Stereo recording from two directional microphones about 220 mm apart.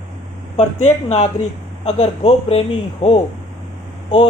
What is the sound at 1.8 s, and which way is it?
Speech, 25° left (ahead or behind).